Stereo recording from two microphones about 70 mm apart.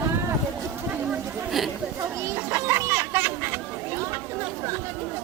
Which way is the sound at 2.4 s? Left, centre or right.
Right.